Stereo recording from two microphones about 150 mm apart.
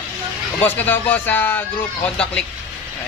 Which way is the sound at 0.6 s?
15° left (ahead or behind).